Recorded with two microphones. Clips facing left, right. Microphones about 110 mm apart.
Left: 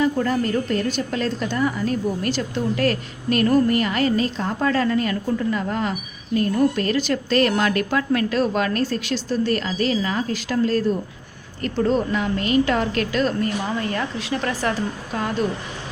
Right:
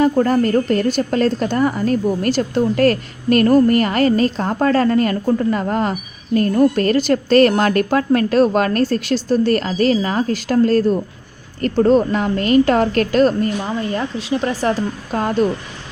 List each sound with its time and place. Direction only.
0.0 s a woman's voice: 45° right (ahead or behind)
13.9 s a woman's voice: 20° right (ahead or behind)